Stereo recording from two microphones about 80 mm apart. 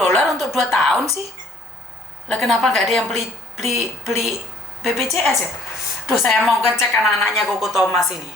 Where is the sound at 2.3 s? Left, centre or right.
Centre.